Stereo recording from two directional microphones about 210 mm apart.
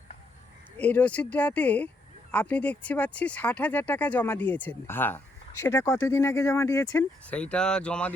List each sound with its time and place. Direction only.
0.8 s speech: 5° left (ahead or behind)